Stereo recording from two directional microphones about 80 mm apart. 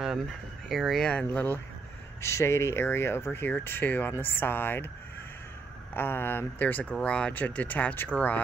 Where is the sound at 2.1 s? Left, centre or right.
Left.